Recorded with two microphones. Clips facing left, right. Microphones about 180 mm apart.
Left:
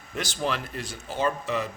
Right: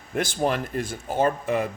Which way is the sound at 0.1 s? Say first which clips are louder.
Right 5 dB; 50° right (ahead or behind).